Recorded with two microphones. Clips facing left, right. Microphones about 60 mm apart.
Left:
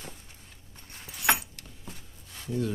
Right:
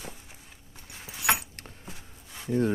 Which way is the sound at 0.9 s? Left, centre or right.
Centre.